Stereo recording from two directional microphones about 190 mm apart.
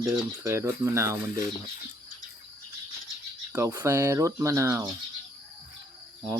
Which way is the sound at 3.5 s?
15° right (ahead or behind).